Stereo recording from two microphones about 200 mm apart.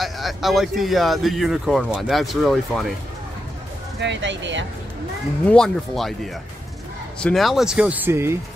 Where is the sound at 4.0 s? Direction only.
65° right (ahead or behind).